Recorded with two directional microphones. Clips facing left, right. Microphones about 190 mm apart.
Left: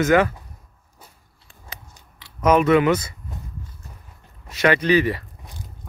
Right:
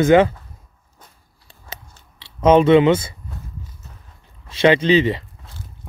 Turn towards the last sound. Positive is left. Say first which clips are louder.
# even
turn(degrees=15)  # may be behind; listen again after turning